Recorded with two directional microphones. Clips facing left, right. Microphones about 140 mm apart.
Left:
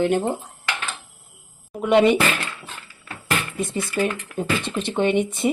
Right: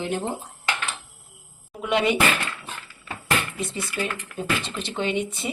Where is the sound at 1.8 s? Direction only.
50° left (ahead or behind).